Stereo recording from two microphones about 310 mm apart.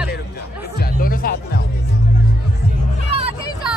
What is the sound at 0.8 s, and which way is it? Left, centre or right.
Music, left.